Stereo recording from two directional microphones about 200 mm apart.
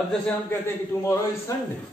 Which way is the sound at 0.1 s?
10° left (ahead or behind).